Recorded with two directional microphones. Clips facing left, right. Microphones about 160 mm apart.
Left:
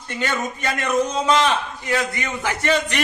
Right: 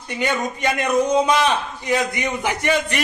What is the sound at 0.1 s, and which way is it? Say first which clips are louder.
A man's voice: right 2 dB; 15° right (ahead or behind).